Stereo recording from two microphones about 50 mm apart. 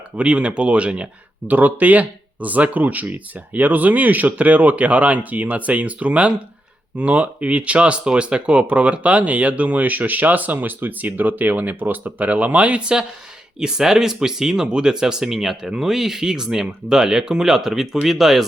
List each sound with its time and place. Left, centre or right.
0.2 s speech: right; by 18.4 s centre